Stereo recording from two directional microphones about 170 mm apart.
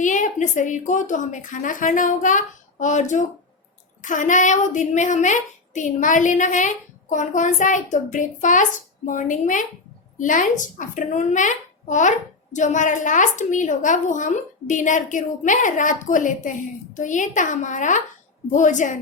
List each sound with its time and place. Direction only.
0.0 s a woman's voice: 50° left (ahead or behind)